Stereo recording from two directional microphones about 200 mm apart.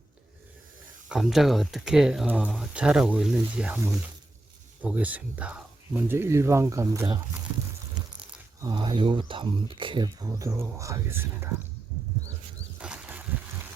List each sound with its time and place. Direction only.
1.0 s speech: centre (ahead or behind)
8.6 s speech: 25° right (ahead or behind)
12.8 s a sound: 5° right (ahead or behind)